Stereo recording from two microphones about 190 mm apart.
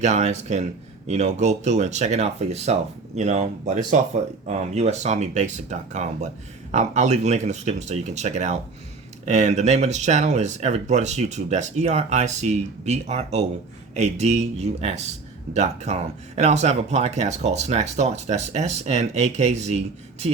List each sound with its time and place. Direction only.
0.0 s speech: 35° right (ahead or behind)